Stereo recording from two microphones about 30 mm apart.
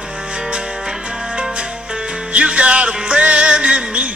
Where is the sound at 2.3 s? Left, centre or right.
Right.